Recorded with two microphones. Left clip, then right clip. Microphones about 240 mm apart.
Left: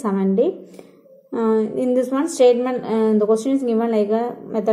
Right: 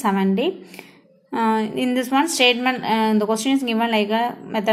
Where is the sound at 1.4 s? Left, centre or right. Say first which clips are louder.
Left 1 dB; right.